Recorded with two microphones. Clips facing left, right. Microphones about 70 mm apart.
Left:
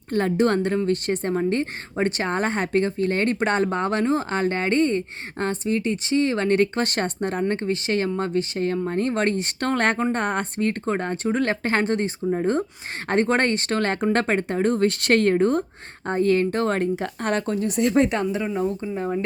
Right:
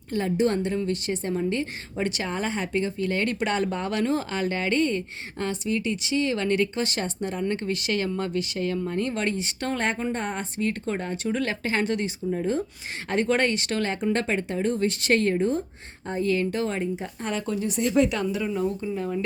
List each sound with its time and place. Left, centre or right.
0.1 s a woman's voice: left
17.4 s a woman's voice: left